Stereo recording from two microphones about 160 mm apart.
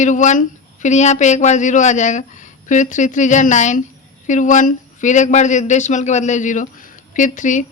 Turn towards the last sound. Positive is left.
turn(degrees=50)  # may be behind; listen again after turning